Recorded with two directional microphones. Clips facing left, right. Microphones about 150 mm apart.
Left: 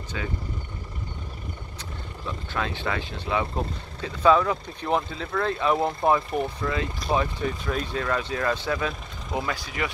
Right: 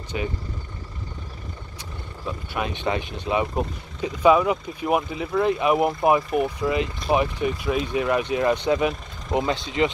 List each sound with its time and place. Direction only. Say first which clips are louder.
0.1 s speech: right 5 dB; 20° right (ahead or behind)
2.5 s speech: right 3 dB; 20° right (ahead or behind)